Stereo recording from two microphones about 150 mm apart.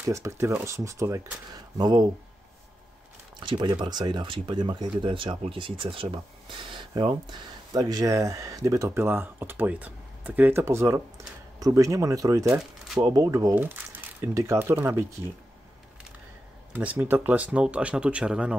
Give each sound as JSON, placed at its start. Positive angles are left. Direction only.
{"t": 0.0, "sound": "speech", "side_deg": -20}
{"t": 3.3, "sound": "speech", "side_deg": -30}
{"t": 13.6, "sound": "speech", "side_deg": -15}
{"t": 16.7, "sound": "speech", "side_deg": -10}